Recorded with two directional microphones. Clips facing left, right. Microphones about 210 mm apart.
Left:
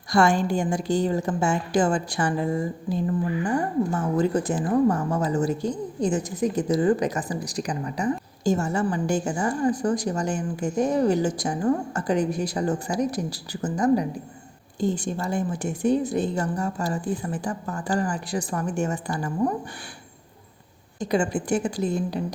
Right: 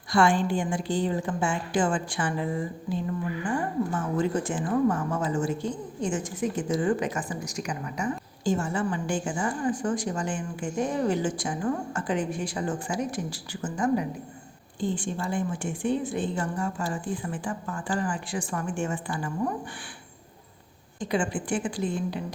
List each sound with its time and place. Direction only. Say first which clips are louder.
0.1 s speech: left 2 dB; 40° left (ahead or behind)
21.0 s speech: left 4 dB; 40° left (ahead or behind)